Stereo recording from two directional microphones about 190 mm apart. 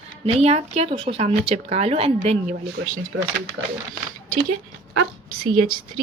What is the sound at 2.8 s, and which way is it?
Speech, 60° right (ahead or behind).